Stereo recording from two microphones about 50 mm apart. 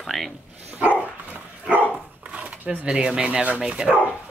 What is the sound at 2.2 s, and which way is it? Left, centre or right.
Speech, right.